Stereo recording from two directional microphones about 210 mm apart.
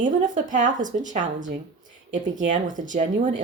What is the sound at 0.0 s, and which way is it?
Speech, 40° right (ahead or behind).